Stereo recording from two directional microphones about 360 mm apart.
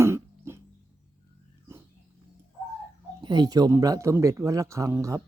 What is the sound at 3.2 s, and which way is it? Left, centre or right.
Speech, centre.